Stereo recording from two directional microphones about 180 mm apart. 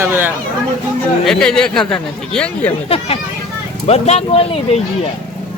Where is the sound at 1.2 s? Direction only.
5° left (ahead or behind).